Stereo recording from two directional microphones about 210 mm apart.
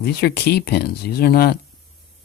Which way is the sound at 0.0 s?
50° left (ahead or behind).